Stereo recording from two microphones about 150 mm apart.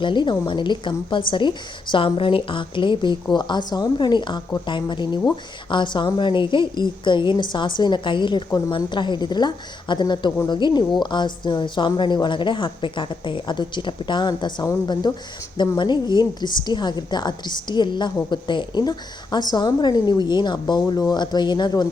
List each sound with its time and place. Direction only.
0.0 s a woman's voice: 30° left (ahead or behind)